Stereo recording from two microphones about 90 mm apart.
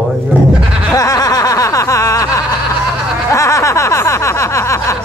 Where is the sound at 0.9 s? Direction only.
40° left (ahead or behind).